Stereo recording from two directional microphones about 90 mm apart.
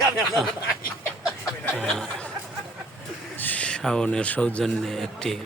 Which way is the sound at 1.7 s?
5° left (ahead or behind).